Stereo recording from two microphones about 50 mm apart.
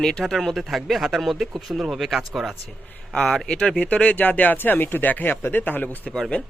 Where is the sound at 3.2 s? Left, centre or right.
Centre.